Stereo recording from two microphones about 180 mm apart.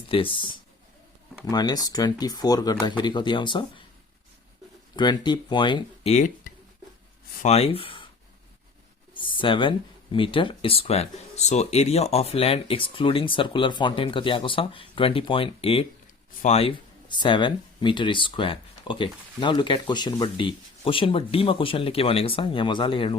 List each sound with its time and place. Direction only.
0.1 s speech: 30° left (ahead or behind)
4.9 s speech: 25° left (ahead or behind)
9.1 s speech: 30° left (ahead or behind)